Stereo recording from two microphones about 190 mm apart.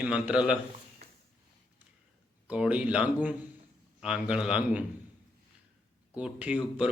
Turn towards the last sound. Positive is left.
turn(degrees=-5)  # may be behind; listen again after turning